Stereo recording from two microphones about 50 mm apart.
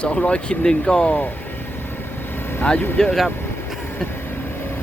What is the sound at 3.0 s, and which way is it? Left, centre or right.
Speech, centre.